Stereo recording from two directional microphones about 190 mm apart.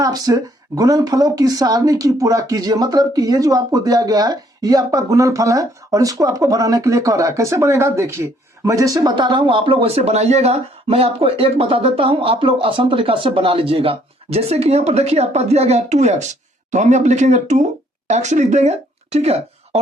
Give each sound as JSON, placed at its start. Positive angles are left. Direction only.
{"t": 0.0, "sound": "speech", "side_deg": -20}